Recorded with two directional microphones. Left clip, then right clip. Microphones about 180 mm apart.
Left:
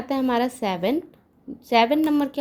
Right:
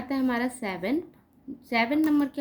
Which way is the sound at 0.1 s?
35° left (ahead or behind).